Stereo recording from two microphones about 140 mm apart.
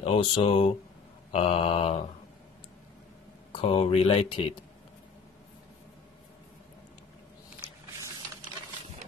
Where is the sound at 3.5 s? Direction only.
45° left (ahead or behind).